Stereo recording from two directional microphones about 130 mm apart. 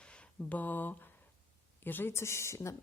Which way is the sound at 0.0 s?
10° left (ahead or behind).